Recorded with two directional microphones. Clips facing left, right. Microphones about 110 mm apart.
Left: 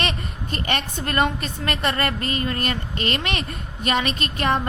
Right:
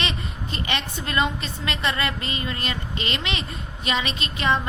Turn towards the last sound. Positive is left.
turn(degrees=50)  # may be behind; listen again after turning